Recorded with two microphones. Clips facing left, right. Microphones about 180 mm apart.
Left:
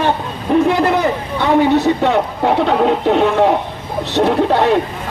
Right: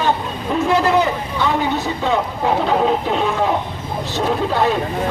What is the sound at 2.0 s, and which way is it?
Speech, 65° left (ahead or behind).